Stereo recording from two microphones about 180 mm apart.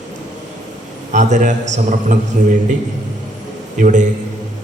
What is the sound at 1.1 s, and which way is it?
Speech, 40° right (ahead or behind).